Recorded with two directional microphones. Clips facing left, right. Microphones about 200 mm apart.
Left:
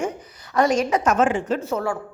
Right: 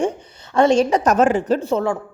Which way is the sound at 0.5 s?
30° right (ahead or behind).